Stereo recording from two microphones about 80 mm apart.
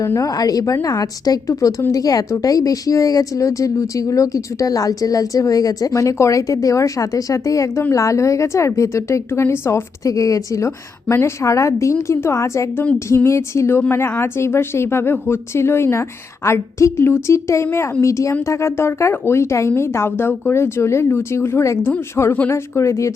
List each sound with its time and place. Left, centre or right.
0.0 s speech: left
0.3 s speech: left